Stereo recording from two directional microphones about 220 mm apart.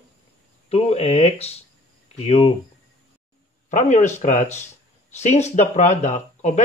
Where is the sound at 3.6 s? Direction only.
35° left (ahead or behind).